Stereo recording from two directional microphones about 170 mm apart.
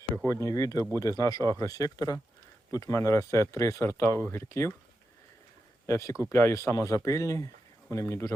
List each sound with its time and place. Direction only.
0.3 s speech: 20° left (ahead or behind)
5.8 s speech: 20° left (ahead or behind)